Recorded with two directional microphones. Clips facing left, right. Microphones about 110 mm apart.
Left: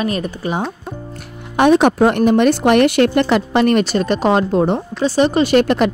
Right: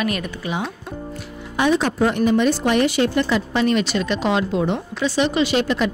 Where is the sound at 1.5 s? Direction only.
65° left (ahead or behind).